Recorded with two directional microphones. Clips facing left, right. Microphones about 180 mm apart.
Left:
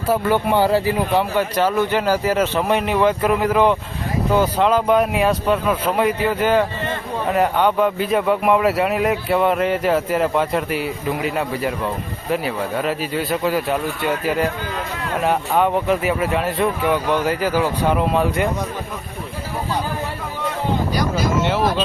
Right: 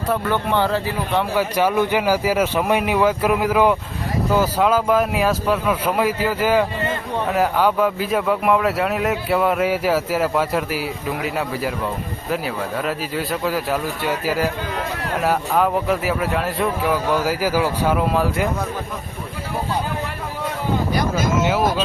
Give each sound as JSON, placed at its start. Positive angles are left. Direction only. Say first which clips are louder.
{"t": 0.1, "sound": "speech", "louder": "left 3 dB", "side_deg": 10}
{"t": 1.4, "sound": "speech", "louder": "even", "side_deg": -10}